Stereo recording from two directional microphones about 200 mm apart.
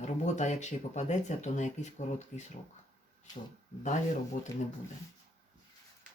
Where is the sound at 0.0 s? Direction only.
35° left (ahead or behind).